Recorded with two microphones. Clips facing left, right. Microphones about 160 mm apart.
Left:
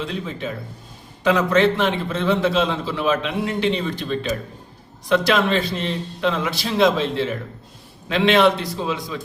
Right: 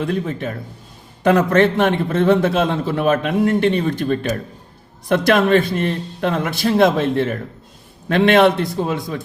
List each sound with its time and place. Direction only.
0.0 s a man's voice: 55° right (ahead or behind)